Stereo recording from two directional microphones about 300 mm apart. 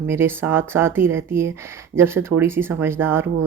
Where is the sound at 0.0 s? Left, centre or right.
Centre.